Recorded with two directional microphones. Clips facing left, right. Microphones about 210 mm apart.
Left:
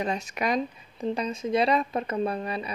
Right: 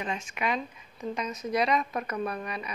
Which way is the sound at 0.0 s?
40° left (ahead or behind).